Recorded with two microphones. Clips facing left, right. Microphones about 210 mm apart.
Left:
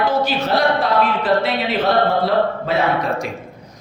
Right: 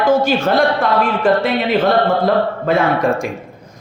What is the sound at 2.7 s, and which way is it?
Speech, 50° right (ahead or behind).